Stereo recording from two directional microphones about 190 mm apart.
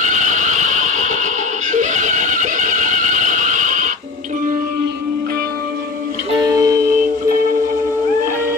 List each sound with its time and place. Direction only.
0.0 s music: 40° right (ahead or behind)
6.3 s music: 20° right (ahead or behind)